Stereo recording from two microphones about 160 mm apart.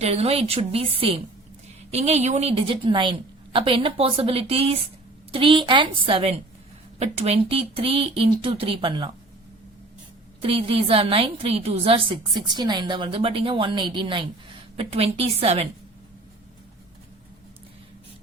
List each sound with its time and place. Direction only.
0.0 s a woman's voice: 40° right (ahead or behind)
10.4 s a woman's voice: 35° right (ahead or behind)